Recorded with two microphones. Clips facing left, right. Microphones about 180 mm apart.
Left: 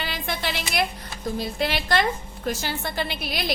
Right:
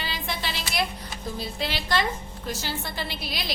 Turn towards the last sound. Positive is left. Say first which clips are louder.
# left 5 dB
turn(degrees=55)  # may be behind; listen again after turning